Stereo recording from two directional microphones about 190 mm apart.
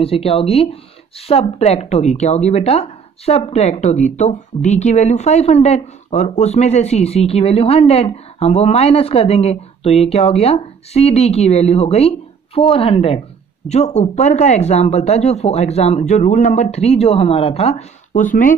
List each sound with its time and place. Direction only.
0.0 s speech: 30° left (ahead or behind)